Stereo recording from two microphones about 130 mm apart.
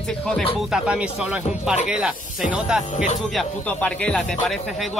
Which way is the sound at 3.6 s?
10° left (ahead or behind).